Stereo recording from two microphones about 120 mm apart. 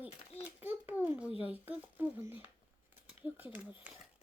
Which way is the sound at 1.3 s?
50° left (ahead or behind).